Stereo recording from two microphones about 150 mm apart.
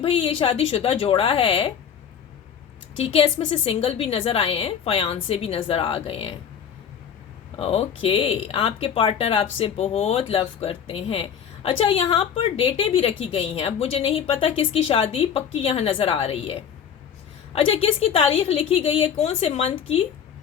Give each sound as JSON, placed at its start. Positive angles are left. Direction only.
{"t": 0.0, "sound": "speech", "side_deg": 40}
{"t": 3.0, "sound": "speech", "side_deg": 40}
{"t": 7.5, "sound": "speech", "side_deg": 40}